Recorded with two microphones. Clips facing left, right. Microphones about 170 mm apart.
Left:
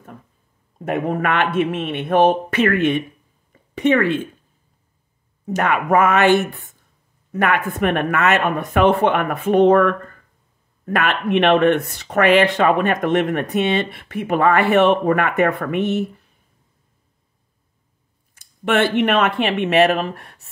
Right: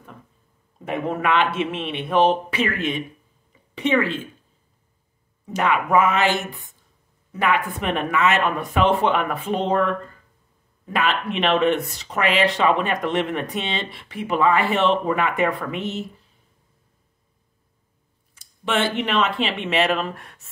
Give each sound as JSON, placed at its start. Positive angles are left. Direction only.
{"t": 0.8, "sound": "speech", "side_deg": 50}
{"t": 3.7, "sound": "speech", "side_deg": 45}
{"t": 5.5, "sound": "speech", "side_deg": 45}
{"t": 18.7, "sound": "speech", "side_deg": 60}